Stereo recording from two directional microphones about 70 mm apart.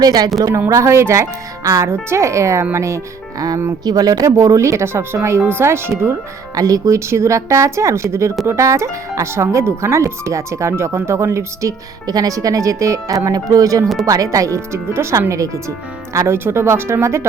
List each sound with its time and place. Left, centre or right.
0.0 s a woman's voice: right
0.7 s speech: right
3.3 s speech: right
6.5 s speech: right
12.0 s speech: right
16.2 s speech: right